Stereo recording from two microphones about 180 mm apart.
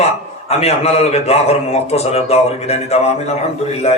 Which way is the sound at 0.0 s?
35° left (ahead or behind).